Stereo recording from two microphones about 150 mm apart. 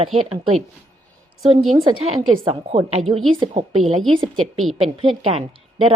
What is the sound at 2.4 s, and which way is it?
A woman's voice, 40° right (ahead or behind).